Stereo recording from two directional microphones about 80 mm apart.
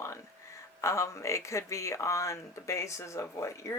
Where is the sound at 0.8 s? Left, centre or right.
Left.